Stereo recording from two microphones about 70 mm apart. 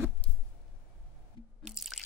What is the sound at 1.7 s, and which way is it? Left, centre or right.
Drip, centre.